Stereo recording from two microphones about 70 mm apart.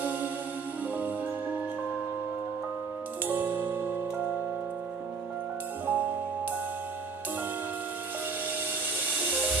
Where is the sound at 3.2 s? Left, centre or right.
Right.